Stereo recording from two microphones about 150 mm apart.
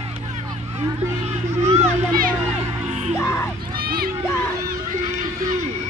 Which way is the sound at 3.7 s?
85° right.